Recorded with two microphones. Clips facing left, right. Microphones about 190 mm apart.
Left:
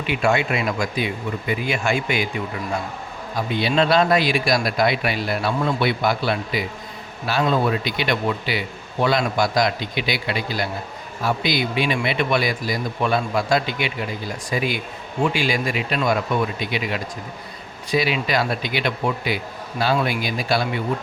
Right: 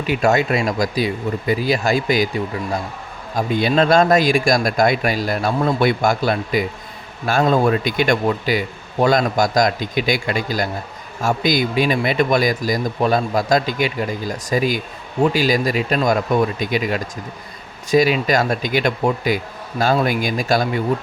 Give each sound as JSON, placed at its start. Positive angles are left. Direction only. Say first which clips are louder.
{"t": 0.1, "sound": "speech", "louder": "right 4 dB", "side_deg": -40}